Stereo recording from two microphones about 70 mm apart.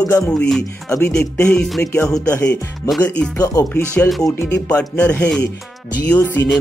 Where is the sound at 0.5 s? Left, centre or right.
Centre.